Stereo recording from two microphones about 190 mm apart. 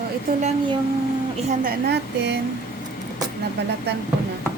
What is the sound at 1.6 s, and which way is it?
Speech, 65° right (ahead or behind).